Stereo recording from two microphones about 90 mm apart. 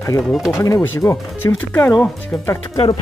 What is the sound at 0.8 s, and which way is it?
Speech, 30° left (ahead or behind).